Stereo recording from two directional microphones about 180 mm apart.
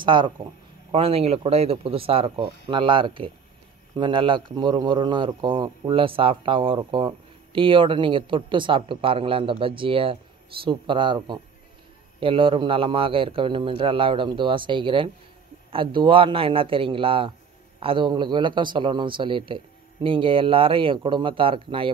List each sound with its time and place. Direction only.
0.0 s speech: 25° right (ahead or behind)